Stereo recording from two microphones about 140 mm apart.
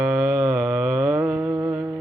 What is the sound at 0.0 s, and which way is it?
Music, 10° right (ahead or behind).